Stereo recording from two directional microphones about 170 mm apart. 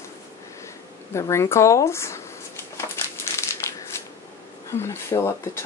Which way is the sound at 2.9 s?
15° left (ahead or behind).